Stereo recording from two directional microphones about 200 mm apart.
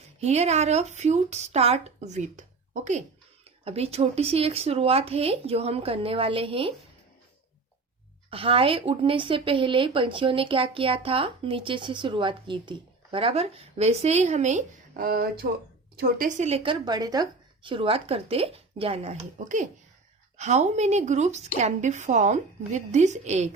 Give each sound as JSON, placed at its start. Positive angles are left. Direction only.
{"t": 0.2, "sound": "speech", "side_deg": -35}
{"t": 3.6, "sound": "a woman's voice", "side_deg": -30}
{"t": 8.3, "sound": "a woman's voice", "side_deg": -25}